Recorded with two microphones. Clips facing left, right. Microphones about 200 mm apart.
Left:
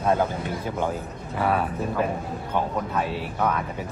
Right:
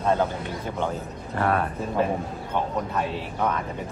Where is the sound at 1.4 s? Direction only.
5° left (ahead or behind).